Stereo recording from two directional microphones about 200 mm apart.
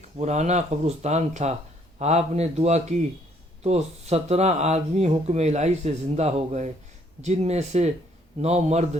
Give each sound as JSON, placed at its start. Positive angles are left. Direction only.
{"t": 0.2, "sound": "speech", "side_deg": -35}